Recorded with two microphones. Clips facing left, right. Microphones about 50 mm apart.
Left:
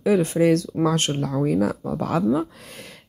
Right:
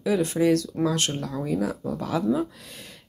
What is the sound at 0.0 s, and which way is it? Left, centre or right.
Speech, left.